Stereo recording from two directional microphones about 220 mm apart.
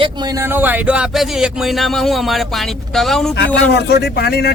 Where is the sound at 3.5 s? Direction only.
50° left (ahead or behind).